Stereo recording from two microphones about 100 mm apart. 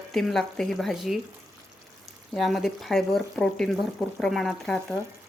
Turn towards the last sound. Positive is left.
turn(degrees=5)  # may be behind; listen again after turning